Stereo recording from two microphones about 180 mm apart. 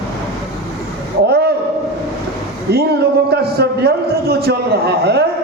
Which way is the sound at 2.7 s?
60° right (ahead or behind).